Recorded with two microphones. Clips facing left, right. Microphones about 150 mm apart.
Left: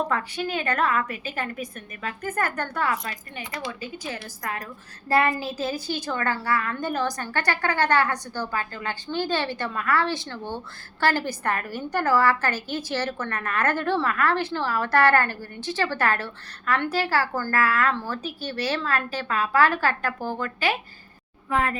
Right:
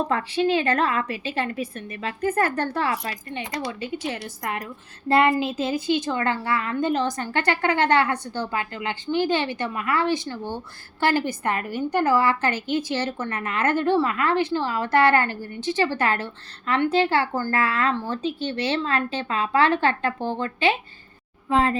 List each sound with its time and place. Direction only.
0.1 s a woman's voice: 30° right (ahead or behind)